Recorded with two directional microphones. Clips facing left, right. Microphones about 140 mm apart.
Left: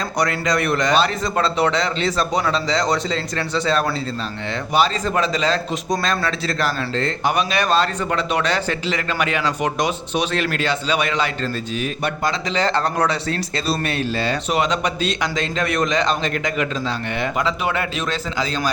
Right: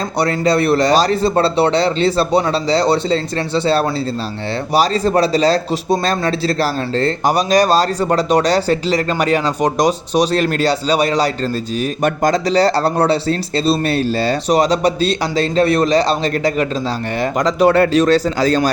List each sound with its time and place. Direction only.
0.2 s a man's voice: 30° right (ahead or behind)